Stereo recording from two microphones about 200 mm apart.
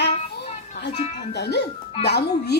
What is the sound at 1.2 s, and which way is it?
Speech, 55° left (ahead or behind).